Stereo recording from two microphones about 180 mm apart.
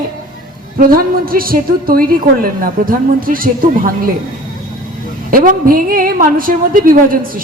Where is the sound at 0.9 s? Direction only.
55° right (ahead or behind).